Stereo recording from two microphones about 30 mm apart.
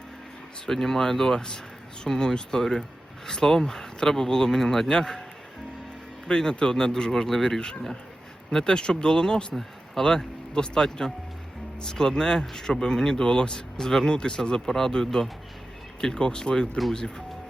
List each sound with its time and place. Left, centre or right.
0.6 s speech: centre
6.2 s speech: left
7.1 s speech: centre
8.6 s speech: left
14.7 s speech: centre